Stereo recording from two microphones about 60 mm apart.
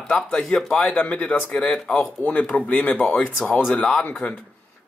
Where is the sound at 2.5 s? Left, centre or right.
Left.